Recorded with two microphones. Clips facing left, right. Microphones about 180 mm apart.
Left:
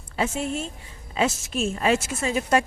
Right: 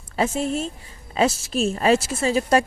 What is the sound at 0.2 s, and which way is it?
A woman's voice, 35° right (ahead or behind).